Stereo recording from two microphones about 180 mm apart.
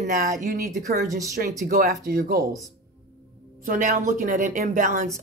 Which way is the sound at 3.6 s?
45° right (ahead or behind).